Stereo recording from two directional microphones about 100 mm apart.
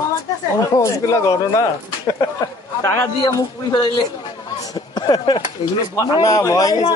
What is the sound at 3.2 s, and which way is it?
Speech, 40° left (ahead or behind).